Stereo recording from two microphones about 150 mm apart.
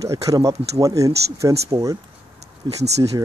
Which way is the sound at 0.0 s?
20° right (ahead or behind).